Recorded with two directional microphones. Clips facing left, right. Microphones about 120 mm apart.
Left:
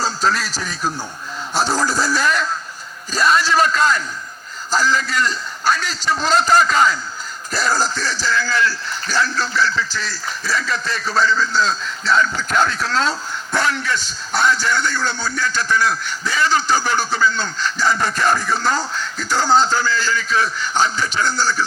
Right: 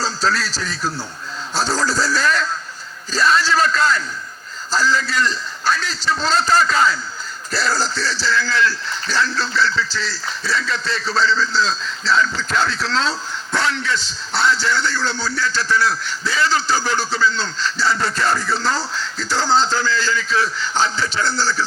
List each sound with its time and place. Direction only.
0.0 s speech: 15° left (ahead or behind)